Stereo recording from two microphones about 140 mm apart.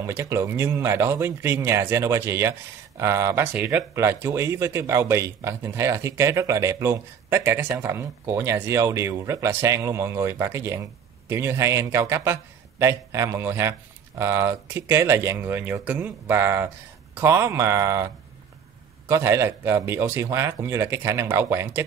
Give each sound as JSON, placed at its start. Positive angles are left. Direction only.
{"t": 0.0, "sound": "speech", "side_deg": -20}
{"t": 19.0, "sound": "speech", "side_deg": -20}